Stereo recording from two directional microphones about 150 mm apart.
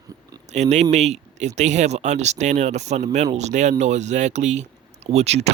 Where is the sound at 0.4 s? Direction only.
50° right (ahead or behind).